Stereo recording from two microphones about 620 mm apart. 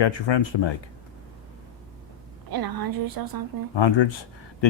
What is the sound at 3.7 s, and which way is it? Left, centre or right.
Speech, left.